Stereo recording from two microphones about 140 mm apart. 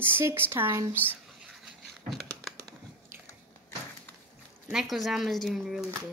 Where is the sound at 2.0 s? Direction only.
Centre (ahead or behind).